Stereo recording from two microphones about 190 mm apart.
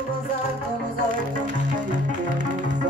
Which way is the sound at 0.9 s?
45° right (ahead or behind).